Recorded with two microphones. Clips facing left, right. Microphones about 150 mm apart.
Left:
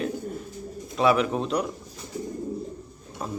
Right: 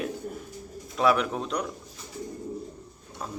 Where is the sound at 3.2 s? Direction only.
5° left (ahead or behind).